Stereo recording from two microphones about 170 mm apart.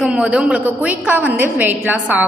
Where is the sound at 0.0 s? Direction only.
5° right (ahead or behind).